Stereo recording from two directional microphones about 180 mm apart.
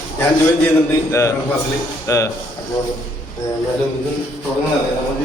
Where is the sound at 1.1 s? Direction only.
15° left (ahead or behind).